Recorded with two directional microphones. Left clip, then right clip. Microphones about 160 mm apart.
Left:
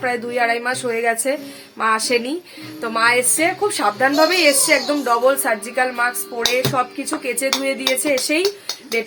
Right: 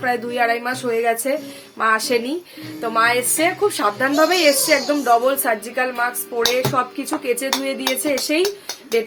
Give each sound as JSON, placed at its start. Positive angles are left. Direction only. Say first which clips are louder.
{"t": 0.0, "sound": "a woman's voice", "louder": "even", "side_deg": 10}